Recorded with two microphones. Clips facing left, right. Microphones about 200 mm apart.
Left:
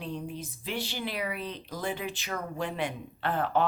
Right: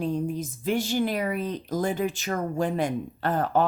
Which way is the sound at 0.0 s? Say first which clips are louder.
Right 9 dB; 45° right (ahead or behind).